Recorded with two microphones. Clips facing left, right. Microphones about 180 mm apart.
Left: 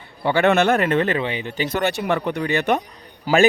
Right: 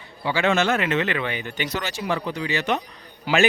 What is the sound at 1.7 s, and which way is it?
Speech, 60° left (ahead or behind).